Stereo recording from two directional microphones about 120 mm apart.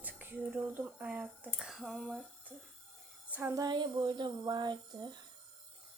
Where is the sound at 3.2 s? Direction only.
15° right (ahead or behind).